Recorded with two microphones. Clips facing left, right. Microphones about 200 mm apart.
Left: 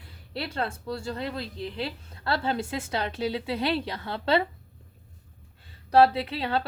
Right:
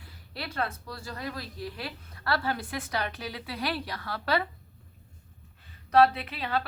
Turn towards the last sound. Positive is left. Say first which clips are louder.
# left 4 dB
turn(degrees=30)  # may be behind; listen again after turning